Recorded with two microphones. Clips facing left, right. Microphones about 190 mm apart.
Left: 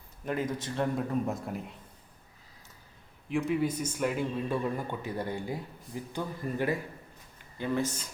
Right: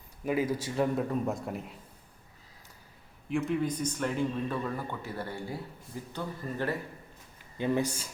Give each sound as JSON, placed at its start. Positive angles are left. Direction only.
{"t": 0.3, "sound": "a man's voice", "side_deg": -10}
{"t": 3.2, "sound": "a man's voice", "side_deg": 0}
{"t": 7.6, "sound": "speech", "side_deg": -15}